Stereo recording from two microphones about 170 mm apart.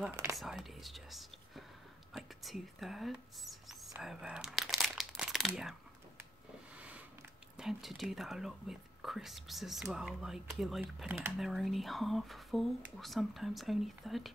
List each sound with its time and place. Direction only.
0.1 s speech: 20° right (ahead or behind)
0.4 s speech: centre (ahead or behind)
2.1 s a sound: centre (ahead or behind)
4.0 s crumpling: 5° right (ahead or behind)
5.5 s speech: centre (ahead or behind)
7.5 s speech: centre (ahead or behind)